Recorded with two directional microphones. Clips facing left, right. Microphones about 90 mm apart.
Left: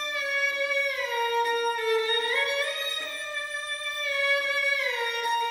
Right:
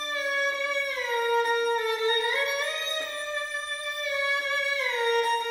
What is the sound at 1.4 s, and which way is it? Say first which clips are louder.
Music: even; 25° right (ahead or behind).